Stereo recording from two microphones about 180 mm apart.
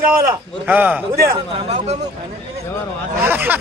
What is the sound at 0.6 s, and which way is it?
Speech, 10° right (ahead or behind).